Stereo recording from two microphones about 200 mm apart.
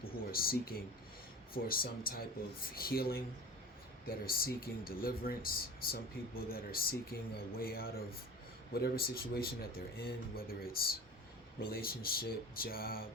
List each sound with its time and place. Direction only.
0.0 s speech: 45° left (ahead or behind)